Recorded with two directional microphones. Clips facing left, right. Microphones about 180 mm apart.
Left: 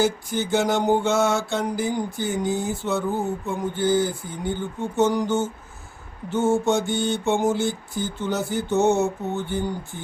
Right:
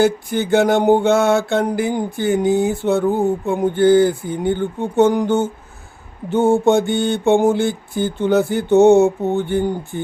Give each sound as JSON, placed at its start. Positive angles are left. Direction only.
{"t": 0.0, "sound": "mantra", "side_deg": -60}